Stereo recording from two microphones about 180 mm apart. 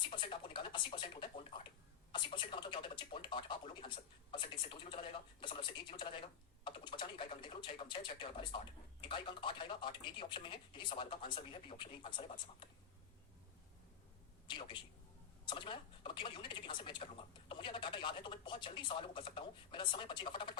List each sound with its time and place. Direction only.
0.1 s speech: 30° left (ahead or behind)
14.4 s a sound: 25° left (ahead or behind)
15.4 s speech: 25° left (ahead or behind)